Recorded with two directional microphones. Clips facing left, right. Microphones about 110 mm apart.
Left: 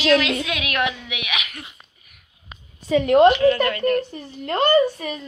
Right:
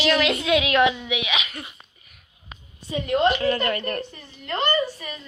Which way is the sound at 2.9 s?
70° left (ahead or behind).